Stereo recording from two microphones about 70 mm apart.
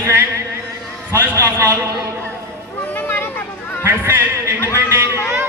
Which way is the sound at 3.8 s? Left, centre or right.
Right.